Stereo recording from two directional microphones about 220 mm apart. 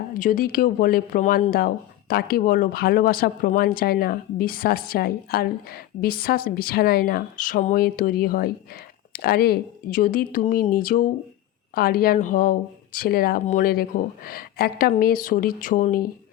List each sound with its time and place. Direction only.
0.1 s speech: 40° left (ahead or behind)